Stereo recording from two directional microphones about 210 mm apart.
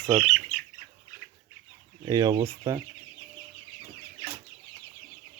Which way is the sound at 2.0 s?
20° right (ahead or behind).